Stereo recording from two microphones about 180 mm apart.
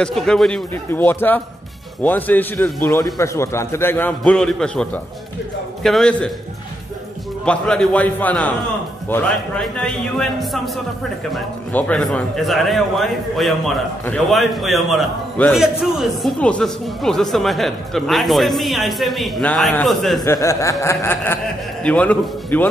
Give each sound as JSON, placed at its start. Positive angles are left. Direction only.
{"t": 0.0, "sound": "a man's voice", "side_deg": 0}
{"t": 7.4, "sound": "a man's voice", "side_deg": 5}
{"t": 20.2, "sound": "a man's voice", "side_deg": 15}